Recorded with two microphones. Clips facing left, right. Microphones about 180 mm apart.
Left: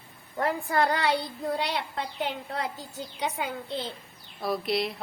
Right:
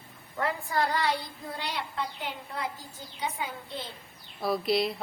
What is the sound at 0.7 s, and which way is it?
Speech, 65° left (ahead or behind).